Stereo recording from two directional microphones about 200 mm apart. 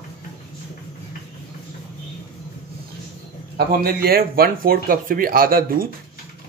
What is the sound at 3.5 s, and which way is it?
Speech, 50° right (ahead or behind).